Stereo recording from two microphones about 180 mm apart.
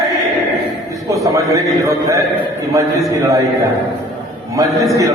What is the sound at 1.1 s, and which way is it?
A man's voice, 15° right (ahead or behind).